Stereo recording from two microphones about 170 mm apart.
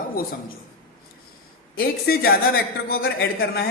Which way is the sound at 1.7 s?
65° left (ahead or behind).